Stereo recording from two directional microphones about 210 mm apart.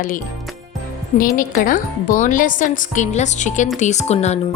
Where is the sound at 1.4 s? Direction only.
40° left (ahead or behind).